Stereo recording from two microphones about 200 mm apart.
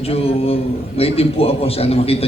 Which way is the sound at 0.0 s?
30° left (ahead or behind).